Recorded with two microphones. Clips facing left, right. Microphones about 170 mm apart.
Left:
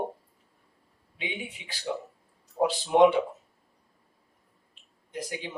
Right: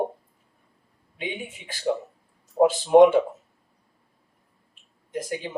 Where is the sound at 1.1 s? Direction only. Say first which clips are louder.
Right 4 dB; 50° right (ahead or behind).